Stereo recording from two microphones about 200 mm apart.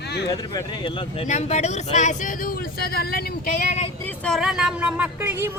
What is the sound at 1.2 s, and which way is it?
Speech, 35° left (ahead or behind).